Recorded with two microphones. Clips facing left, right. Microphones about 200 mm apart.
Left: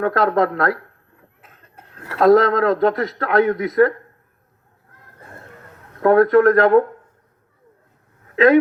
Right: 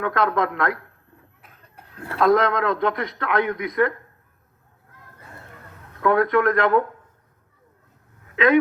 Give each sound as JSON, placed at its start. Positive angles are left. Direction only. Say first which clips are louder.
{"t": 0.0, "sound": "a man's voice", "louder": "left 5 dB", "side_deg": 40}
{"t": 2.1, "sound": "a man's voice", "louder": "left 5 dB", "side_deg": 40}
{"t": 6.0, "sound": "a man's voice", "louder": "left 6 dB", "side_deg": 40}